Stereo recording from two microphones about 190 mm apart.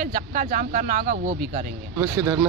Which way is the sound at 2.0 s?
15° right (ahead or behind).